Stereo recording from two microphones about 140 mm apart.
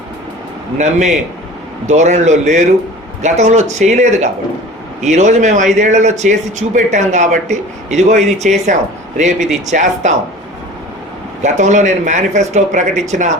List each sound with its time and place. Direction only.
0.8 s speech: 55° right (ahead or behind)
11.4 s speech: 60° right (ahead or behind)